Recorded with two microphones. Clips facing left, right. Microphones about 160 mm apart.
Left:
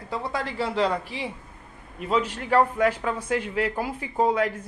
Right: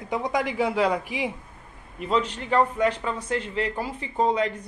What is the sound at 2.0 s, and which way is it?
A man's voice, 5° left (ahead or behind).